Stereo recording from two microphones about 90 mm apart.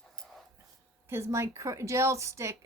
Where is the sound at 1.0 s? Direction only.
30° right (ahead or behind).